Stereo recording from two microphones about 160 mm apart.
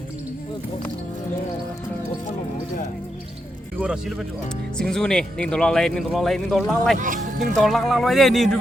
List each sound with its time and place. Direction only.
3.8 s speech: 5° right (ahead or behind)
6.9 s speech: 55° right (ahead or behind)
7.5 s speech: centre (ahead or behind)